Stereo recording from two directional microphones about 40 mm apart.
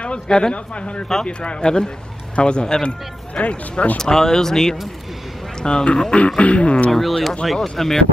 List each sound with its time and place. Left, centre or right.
0.0 s speech: left
4.0 s speech: centre; by 6.9 s left
6.9 s speech: centre